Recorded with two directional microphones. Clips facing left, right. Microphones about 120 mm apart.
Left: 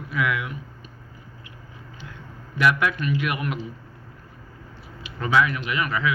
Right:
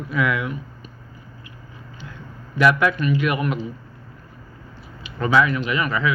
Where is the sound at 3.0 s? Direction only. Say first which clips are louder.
Right 5 dB; 35° right (ahead or behind).